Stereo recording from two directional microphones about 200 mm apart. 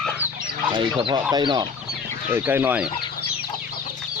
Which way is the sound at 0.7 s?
25° right (ahead or behind).